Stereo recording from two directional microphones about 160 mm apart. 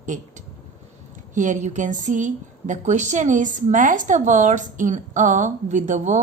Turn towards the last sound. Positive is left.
turn(degrees=-50)  # may be behind; listen again after turning